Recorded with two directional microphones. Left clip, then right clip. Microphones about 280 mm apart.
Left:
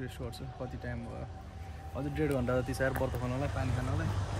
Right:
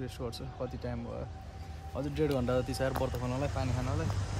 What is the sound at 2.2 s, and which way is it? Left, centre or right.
Speech, centre.